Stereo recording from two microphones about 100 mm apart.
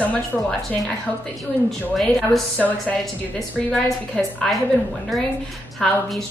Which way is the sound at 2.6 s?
15° left (ahead or behind).